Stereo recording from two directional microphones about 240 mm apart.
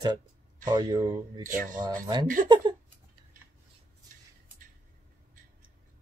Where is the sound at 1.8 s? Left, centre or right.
Centre.